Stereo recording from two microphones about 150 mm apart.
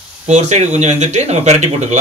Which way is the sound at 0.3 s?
50° right (ahead or behind).